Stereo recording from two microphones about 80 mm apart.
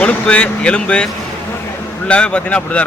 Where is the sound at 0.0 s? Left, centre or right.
Centre.